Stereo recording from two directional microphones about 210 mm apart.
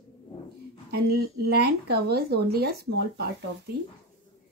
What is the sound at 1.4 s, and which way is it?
Speech, 50° right (ahead or behind).